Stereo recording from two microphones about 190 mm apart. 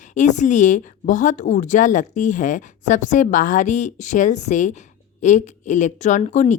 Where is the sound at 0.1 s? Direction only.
40° left (ahead or behind).